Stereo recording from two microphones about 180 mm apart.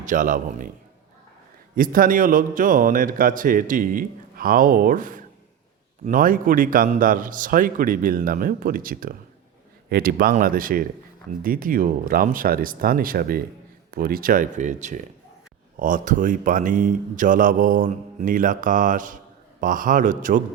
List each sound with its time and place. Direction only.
0.0 s a man's voice: 45° right (ahead or behind)
1.7 s a man's voice: 50° right (ahead or behind)